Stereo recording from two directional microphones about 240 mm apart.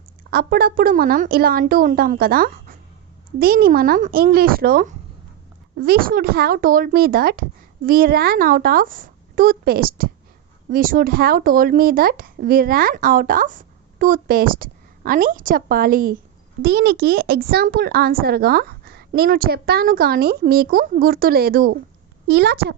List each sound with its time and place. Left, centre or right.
0.3 s a child's voice: right